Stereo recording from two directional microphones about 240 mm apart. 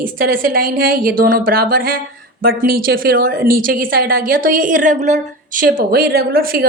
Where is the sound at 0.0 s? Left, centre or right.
Right.